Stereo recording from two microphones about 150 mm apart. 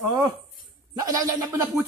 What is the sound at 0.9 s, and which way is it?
Speech, 25° right (ahead or behind).